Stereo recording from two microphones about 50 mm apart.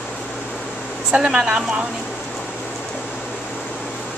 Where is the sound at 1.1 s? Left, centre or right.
Right.